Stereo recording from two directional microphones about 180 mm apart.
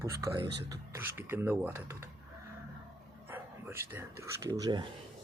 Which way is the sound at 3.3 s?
15° right (ahead or behind).